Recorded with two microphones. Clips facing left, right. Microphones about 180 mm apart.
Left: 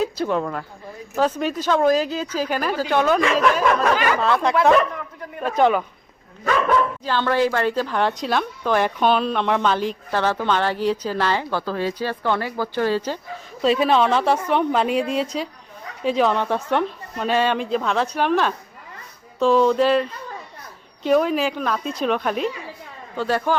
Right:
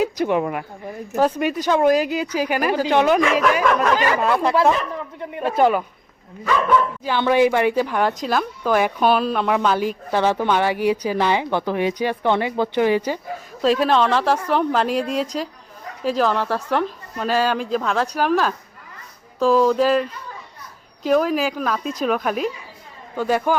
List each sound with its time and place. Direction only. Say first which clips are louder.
0.0 s speech: right 2 dB; 15° right (ahead or behind)
5.5 s speech: even; 5° right (ahead or behind)
7.0 s speech: right 3 dB; 15° right (ahead or behind)
13.6 s speech: even; centre (ahead or behind)